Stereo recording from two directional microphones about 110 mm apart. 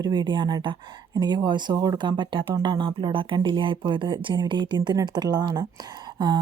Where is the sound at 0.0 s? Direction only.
45° right (ahead or behind).